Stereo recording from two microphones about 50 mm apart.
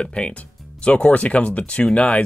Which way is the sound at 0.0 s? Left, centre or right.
Left.